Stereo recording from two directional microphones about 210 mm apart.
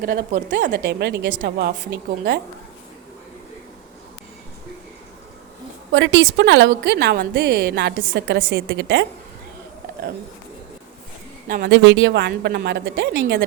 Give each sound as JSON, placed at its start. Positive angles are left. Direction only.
{"t": 0.0, "sound": "a woman's voice", "side_deg": -40}
{"t": 0.6, "sound": "a woman's voice", "side_deg": -50}
{"t": 5.9, "sound": "a woman's voice", "side_deg": -60}
{"t": 11.4, "sound": "speech", "side_deg": -40}
{"t": 11.7, "sound": "a woman's voice", "side_deg": -60}